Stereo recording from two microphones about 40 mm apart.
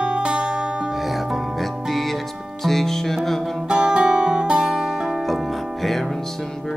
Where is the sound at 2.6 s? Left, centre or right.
Centre.